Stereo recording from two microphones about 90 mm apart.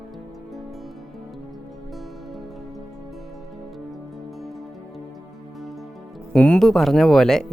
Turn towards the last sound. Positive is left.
turn(degrees=5)  # may be behind; listen again after turning